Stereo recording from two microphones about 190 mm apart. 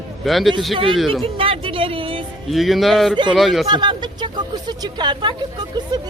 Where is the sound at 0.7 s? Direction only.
25° right (ahead or behind).